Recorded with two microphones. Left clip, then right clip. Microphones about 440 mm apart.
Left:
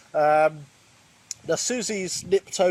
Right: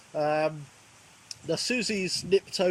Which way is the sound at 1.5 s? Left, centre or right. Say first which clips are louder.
Left 3 dB; centre.